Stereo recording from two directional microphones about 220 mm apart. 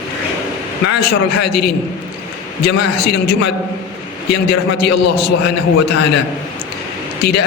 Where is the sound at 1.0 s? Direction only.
45° left (ahead or behind).